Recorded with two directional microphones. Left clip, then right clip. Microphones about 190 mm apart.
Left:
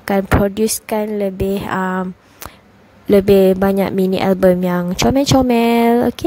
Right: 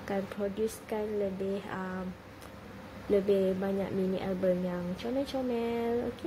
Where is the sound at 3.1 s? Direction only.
45° left (ahead or behind).